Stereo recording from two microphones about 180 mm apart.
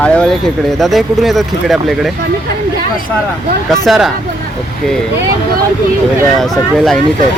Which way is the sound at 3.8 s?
Centre (ahead or behind).